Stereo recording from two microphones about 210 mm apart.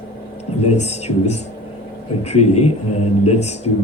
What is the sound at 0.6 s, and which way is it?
A man's voice, 30° left (ahead or behind).